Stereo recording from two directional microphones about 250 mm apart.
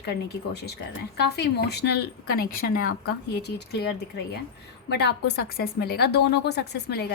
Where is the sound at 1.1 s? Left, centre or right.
Left.